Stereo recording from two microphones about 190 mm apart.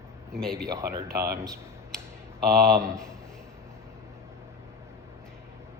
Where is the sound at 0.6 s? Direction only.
15° right (ahead or behind).